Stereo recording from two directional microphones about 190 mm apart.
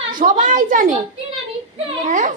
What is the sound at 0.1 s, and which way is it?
Speech, 45° right (ahead or behind).